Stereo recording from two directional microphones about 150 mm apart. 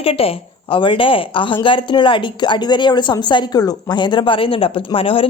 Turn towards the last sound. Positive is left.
turn(degrees=40)  # may be behind; listen again after turning